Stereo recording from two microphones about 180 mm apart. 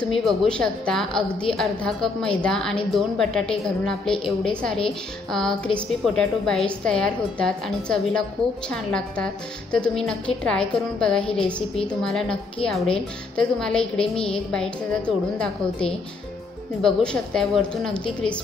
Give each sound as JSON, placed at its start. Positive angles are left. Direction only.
{"t": 0.0, "sound": "a woman's voice", "side_deg": 0}
{"t": 13.4, "sound": "a woman's voice", "side_deg": 5}
{"t": 14.1, "sound": "a woman's voice", "side_deg": 30}
{"t": 14.5, "sound": "a woman's voice", "side_deg": 5}